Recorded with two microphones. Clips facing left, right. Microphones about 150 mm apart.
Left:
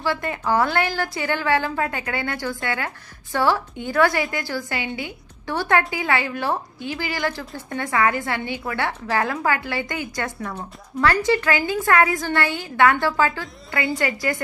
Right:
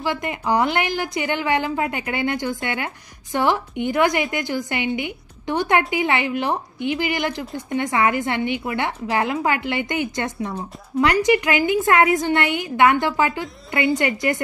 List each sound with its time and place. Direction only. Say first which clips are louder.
0.0 s a woman's voice: even; 15° right (ahead or behind)